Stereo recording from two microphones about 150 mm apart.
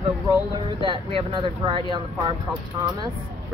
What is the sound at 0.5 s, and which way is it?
Speech, 35° right (ahead or behind).